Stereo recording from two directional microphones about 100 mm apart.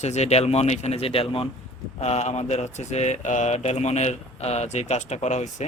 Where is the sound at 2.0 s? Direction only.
90° left.